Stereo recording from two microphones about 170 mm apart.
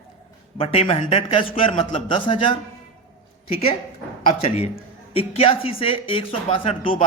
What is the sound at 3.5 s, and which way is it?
Speech, 35° left (ahead or behind).